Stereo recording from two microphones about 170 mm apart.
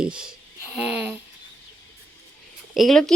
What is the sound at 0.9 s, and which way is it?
Speech, 10° right (ahead or behind).